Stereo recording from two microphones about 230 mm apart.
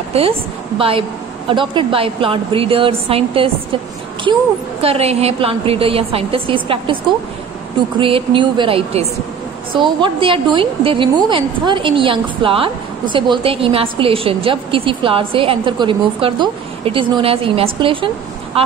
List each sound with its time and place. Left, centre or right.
0.1 s a woman's voice: right
8.0 s a woman's voice: right